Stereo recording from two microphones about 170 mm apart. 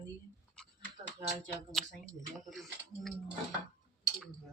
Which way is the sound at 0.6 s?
5° left (ahead or behind).